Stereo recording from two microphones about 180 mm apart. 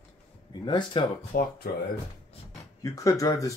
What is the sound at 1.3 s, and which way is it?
Speech, 50° left (ahead or behind).